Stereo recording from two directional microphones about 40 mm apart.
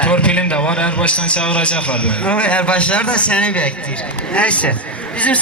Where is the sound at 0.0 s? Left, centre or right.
Left.